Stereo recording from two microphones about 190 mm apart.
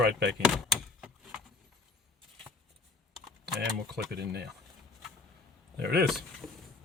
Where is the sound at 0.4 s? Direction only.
Centre (ahead or behind).